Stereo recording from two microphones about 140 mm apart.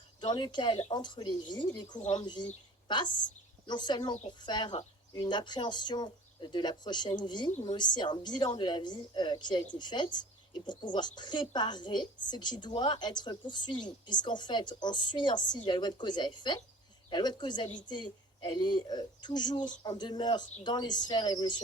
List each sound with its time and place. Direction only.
0.2 s a woman's voice: 30° left (ahead or behind)
2.0 s speech: 50° left (ahead or behind)
2.2 s a woman's voice: 30° left (ahead or behind)